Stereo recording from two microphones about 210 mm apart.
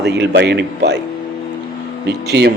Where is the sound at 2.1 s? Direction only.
50° right (ahead or behind).